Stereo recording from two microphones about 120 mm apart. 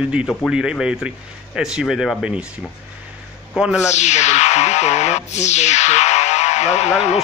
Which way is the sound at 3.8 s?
75° left (ahead or behind).